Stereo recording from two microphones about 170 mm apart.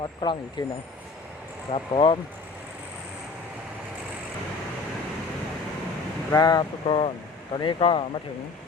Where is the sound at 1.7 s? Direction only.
30° left (ahead or behind).